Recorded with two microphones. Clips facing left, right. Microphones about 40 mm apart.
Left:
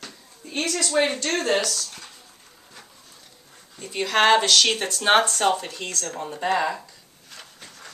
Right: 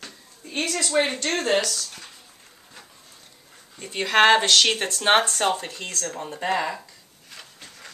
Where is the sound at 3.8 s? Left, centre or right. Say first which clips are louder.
Right 2 dB; right.